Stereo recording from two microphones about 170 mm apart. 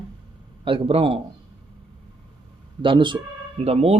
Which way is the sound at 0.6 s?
30° right (ahead or behind).